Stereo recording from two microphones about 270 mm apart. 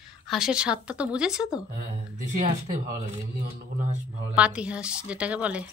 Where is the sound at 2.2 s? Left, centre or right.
Right.